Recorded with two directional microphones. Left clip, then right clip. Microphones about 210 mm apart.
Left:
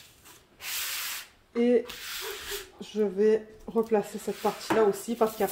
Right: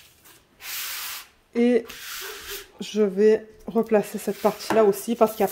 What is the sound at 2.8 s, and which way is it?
Speech, 60° right (ahead or behind).